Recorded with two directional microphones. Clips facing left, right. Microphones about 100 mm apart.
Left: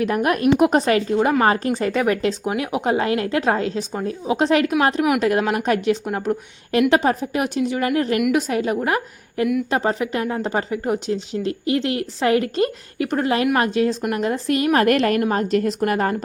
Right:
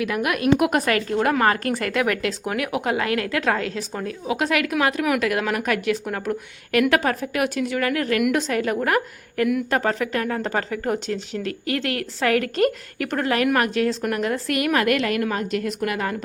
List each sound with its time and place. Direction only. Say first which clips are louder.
0.0 s a woman's voice: left 4 dB; 35° left (ahead or behind)
8.3 s a woman's voice: left 2 dB; 15° left (ahead or behind); by 16.1 s 40° left (ahead or behind)